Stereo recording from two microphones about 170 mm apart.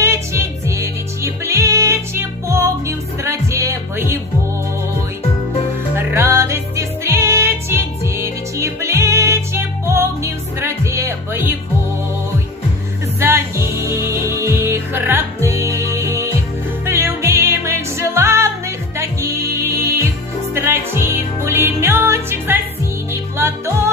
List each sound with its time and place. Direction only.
0.0 s music: 15° right (ahead or behind)
5.9 s music: 15° right (ahead or behind)
13.2 s music: 15° right (ahead or behind)